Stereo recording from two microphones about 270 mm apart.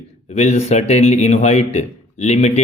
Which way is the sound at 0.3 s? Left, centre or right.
Left.